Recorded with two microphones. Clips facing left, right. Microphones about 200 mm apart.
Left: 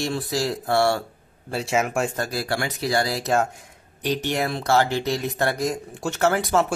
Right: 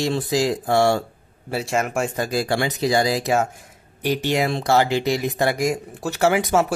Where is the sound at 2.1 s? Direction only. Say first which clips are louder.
Right 4 dB; 15° right (ahead or behind).